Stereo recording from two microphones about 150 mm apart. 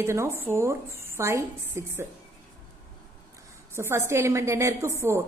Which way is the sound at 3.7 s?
15° right (ahead or behind).